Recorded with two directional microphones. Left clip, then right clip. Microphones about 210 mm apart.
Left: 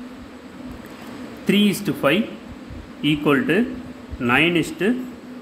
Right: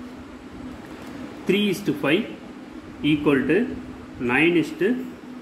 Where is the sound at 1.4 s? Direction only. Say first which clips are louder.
Left 2 dB; 40° left (ahead or behind).